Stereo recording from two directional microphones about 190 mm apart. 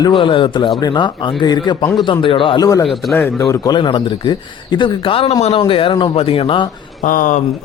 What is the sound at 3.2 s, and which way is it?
Speech, 15° left (ahead or behind).